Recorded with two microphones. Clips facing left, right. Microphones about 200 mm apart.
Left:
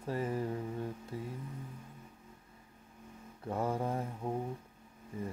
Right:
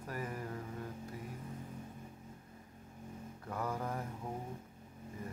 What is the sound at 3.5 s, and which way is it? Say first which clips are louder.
Mantra: left 5 dB; 30° left (ahead or behind).